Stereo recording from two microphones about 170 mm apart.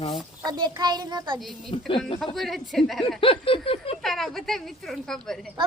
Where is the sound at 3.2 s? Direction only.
30° left (ahead or behind).